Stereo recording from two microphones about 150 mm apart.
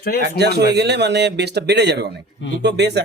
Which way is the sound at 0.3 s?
90° right.